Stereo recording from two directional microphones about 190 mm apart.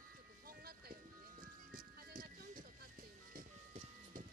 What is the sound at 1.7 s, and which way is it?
Music, 45° right (ahead or behind).